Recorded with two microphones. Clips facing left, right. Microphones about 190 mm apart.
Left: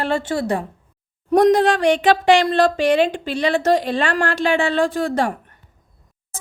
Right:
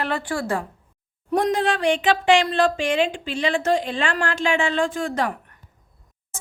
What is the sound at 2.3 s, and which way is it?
A woman's voice, 40° left (ahead or behind).